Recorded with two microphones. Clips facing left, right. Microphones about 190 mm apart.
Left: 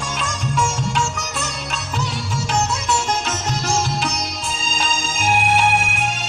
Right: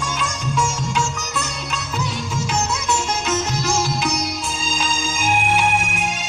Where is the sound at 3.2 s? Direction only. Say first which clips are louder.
Right 2 dB; 40° left (ahead or behind).